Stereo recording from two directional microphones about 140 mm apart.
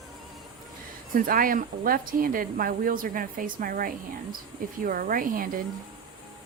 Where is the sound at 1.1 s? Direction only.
90° right.